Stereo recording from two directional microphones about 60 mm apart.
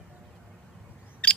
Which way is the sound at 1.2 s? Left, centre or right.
Centre.